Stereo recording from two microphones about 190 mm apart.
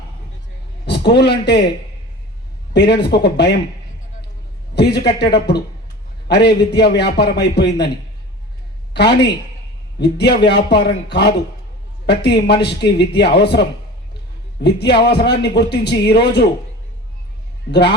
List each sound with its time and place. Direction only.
0.9 s a man's voice: 60° left (ahead or behind)
2.7 s a man's voice: 60° left (ahead or behind)
4.7 s a man's voice: 60° left (ahead or behind)
8.9 s a woman's voice: 60° left (ahead or behind)
17.7 s a man's voice: 60° left (ahead or behind)